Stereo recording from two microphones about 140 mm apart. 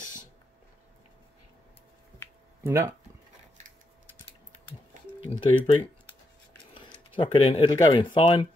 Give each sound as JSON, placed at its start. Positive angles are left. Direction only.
{"t": 2.6, "sound": "speech", "side_deg": -20}
{"t": 5.3, "sound": "speech", "side_deg": 35}
{"t": 7.2, "sound": "speech", "side_deg": 35}